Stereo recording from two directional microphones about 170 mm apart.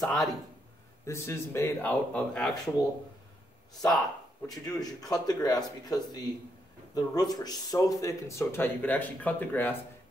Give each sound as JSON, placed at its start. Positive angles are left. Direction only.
{"t": 0.0, "sound": "speech", "side_deg": 0}
{"t": 1.0, "sound": "speech", "side_deg": 15}
{"t": 4.5, "sound": "speech", "side_deg": 20}